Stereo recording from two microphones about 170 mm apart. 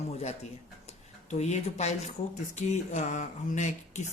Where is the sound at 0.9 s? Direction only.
40° left (ahead or behind).